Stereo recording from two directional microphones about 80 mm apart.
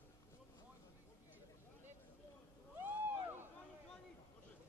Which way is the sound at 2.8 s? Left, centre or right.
Right.